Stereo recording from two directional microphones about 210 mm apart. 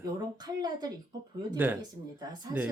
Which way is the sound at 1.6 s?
10° right (ahead or behind).